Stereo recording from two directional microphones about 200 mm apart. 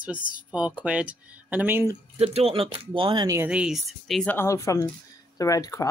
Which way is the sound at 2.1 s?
30° right (ahead or behind).